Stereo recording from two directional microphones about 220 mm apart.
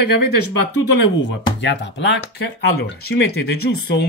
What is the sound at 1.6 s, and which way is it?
Speech, 55° left (ahead or behind).